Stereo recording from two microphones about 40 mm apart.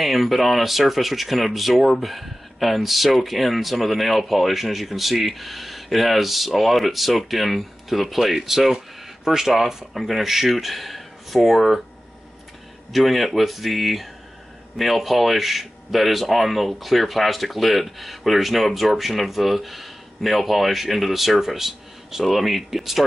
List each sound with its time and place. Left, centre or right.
0.0 s speech: centre
12.9 s speech: centre